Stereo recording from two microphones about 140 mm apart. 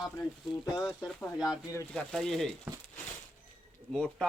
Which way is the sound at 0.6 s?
25° left (ahead or behind).